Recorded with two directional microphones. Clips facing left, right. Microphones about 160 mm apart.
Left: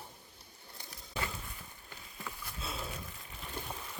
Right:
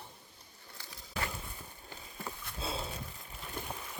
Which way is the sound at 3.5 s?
10° right (ahead or behind).